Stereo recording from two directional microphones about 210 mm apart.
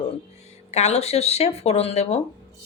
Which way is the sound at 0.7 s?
30° left (ahead or behind).